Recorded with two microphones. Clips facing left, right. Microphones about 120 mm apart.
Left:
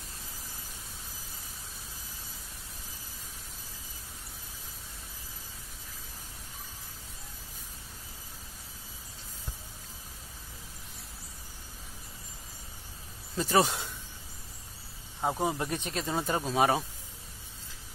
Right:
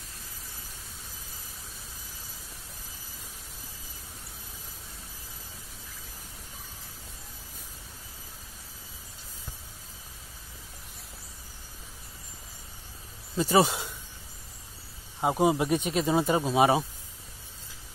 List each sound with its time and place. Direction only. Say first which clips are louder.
13.4 s speech: right 3 dB; 5° right (ahead or behind)
15.1 s speech: right 6 dB; 15° right (ahead or behind)